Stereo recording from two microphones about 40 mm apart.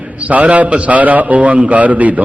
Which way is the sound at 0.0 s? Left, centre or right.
Right.